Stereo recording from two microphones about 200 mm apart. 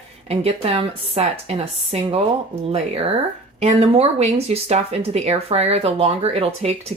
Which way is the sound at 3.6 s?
30° right (ahead or behind).